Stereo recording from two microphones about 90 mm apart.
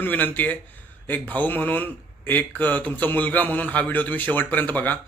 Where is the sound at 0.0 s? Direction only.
20° left (ahead or behind).